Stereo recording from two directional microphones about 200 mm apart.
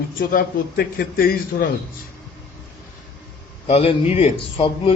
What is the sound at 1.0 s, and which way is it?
Speech, 50° left (ahead or behind).